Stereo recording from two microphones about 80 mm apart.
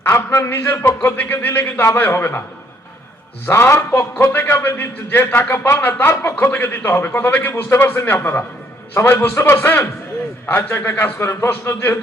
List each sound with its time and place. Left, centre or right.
0.0 s a man's voice: left
3.4 s a man's voice: left